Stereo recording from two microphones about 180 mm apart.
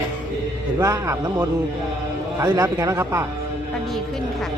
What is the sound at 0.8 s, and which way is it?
Speech, 15° right (ahead or behind).